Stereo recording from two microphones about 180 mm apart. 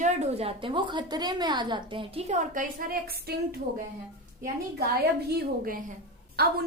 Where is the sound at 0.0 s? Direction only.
40° right (ahead or behind).